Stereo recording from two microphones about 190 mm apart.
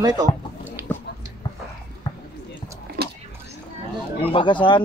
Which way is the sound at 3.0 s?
55° right (ahead or behind).